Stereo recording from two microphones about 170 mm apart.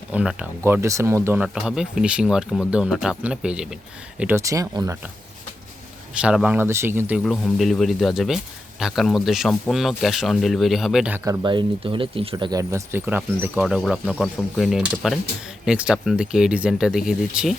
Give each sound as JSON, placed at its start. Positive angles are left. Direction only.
{"t": 0.1, "sound": "speech", "side_deg": -5}
{"t": 6.1, "sound": "speech", "side_deg": -5}
{"t": 7.2, "sound": "speech", "side_deg": 0}
{"t": 11.3, "sound": "speech", "side_deg": -25}